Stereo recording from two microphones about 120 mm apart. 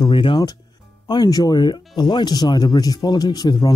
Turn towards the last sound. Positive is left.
turn(degrees=35)  # may be behind; listen again after turning